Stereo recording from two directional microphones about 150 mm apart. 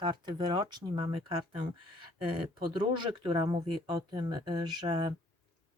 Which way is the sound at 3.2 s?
30° right (ahead or behind).